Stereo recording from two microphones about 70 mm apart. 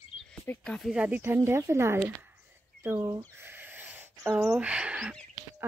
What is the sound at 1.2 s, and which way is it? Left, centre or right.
Speech, right.